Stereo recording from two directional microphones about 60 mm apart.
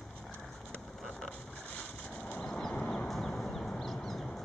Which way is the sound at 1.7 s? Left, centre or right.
Centre.